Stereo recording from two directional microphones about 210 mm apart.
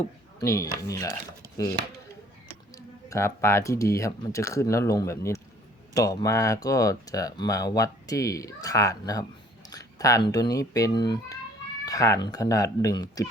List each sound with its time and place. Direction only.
0.3 s speech: 15° left (ahead or behind)
2.7 s speech: 15° left (ahead or behind)